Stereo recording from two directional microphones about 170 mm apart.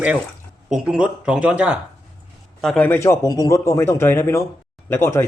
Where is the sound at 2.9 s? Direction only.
15° left (ahead or behind).